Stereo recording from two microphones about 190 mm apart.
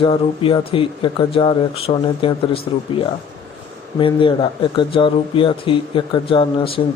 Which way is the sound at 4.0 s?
25° left (ahead or behind).